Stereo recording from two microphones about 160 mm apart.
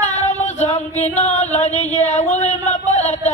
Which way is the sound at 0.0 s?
45° left (ahead or behind).